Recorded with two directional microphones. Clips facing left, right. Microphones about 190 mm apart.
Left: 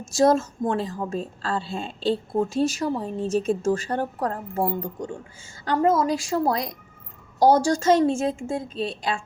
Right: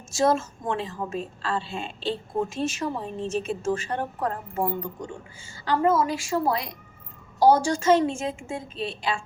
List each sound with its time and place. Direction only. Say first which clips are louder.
0.2 s a woman's voice: left 4 dB; 40° left (ahead or behind)